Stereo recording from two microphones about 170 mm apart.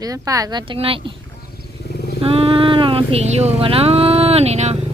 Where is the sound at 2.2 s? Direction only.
35° right (ahead or behind).